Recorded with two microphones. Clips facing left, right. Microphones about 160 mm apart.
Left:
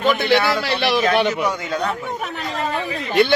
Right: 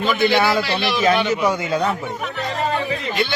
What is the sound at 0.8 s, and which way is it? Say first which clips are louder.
Speech: left 3 dB; 65° left (ahead or behind).